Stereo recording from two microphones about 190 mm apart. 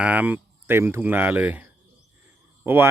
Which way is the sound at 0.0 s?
10° right (ahead or behind).